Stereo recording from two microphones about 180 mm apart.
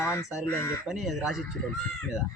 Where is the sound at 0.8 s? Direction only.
Centre (ahead or behind).